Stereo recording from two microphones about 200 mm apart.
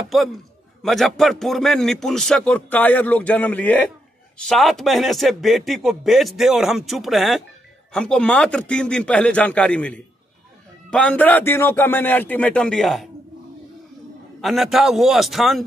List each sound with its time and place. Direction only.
0.1 s a man's voice: centre (ahead or behind)
14.4 s speech: centre (ahead or behind)